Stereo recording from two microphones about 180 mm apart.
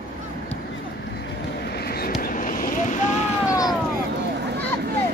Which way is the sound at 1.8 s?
60° left (ahead or behind).